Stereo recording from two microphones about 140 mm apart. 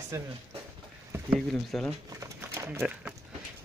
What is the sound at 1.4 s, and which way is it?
Speech, 5° left (ahead or behind).